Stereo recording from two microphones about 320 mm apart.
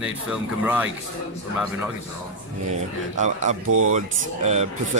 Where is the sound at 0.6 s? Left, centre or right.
Centre.